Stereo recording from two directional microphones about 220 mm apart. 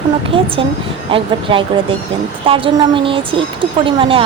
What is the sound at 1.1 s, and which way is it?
A woman's voice, 25° right (ahead or behind).